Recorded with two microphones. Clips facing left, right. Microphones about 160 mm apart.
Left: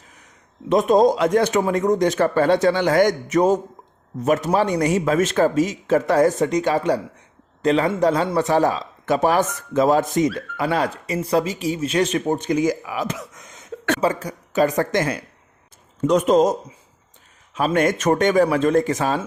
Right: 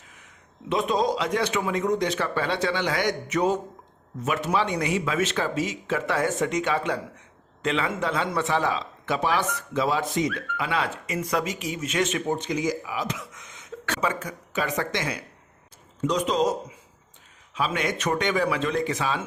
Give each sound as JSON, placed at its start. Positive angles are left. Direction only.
{"t": 0.7, "sound": "a man's voice", "side_deg": 45}
{"t": 14.0, "sound": "a man's voice", "side_deg": 35}